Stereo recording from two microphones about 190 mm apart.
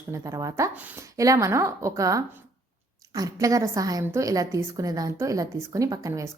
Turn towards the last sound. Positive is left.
turn(degrees=-15)  # may be behind; listen again after turning